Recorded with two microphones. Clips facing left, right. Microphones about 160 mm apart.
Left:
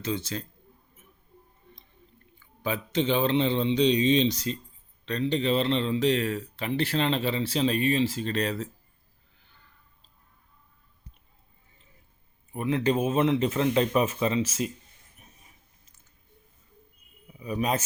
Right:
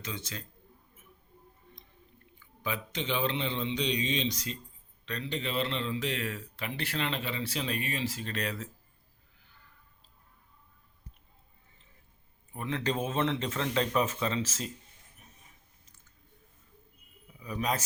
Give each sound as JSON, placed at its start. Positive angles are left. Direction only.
{"t": 0.0, "sound": "speech", "side_deg": 30}
{"t": 2.6, "sound": "speech", "side_deg": 30}
{"t": 12.5, "sound": "speech", "side_deg": 15}
{"t": 17.4, "sound": "speech", "side_deg": 20}